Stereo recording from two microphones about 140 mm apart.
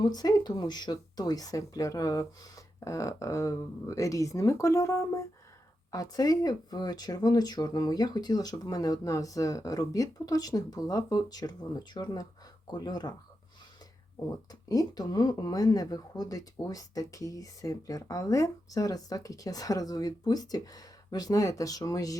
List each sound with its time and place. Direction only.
0.0 s speech: 25° left (ahead or behind)
14.3 s speech: 25° left (ahead or behind)